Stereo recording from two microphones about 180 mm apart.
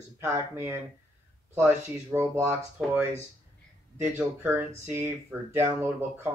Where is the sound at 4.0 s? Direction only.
10° right (ahead or behind).